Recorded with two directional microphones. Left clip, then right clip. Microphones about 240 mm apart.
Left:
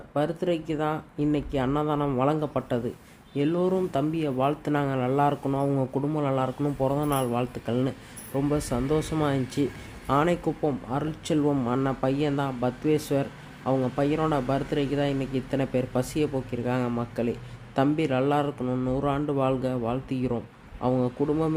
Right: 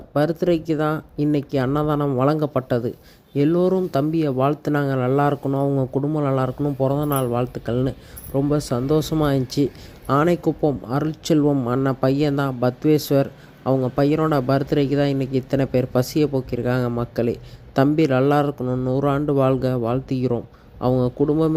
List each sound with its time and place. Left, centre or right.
0.1 s a man's voice: right